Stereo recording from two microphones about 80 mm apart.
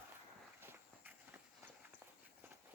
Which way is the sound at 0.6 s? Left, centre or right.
Right.